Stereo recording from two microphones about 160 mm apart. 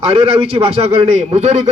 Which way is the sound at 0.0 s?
40° right (ahead or behind).